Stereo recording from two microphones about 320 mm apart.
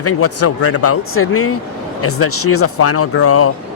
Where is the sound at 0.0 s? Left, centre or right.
Left.